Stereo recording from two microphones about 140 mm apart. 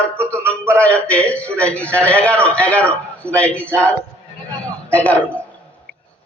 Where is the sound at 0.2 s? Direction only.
10° left (ahead or behind).